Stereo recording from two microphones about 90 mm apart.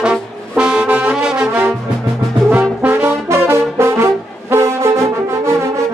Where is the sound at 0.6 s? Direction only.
10° right (ahead or behind).